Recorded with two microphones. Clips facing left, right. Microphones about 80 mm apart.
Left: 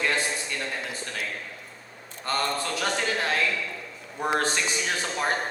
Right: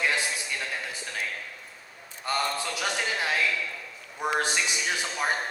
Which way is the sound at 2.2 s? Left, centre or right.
Centre.